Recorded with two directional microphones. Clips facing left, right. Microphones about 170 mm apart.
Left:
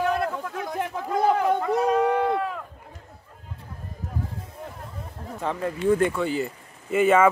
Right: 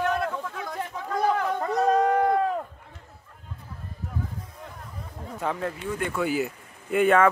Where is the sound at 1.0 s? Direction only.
20° left (ahead or behind).